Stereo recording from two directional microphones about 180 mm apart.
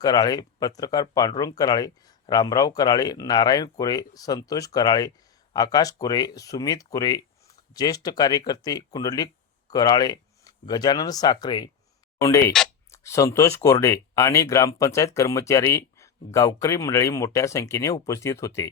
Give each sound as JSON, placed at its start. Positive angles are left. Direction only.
{"t": 0.0, "sound": "speech", "side_deg": 20}